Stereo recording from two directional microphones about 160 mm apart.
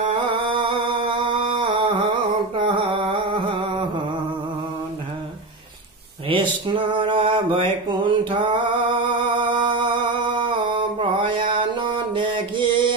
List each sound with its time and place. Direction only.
0.3 s music: 30° right (ahead or behind)
2.6 s a sound: 30° right (ahead or behind)
6.2 s mantra: 30° right (ahead or behind)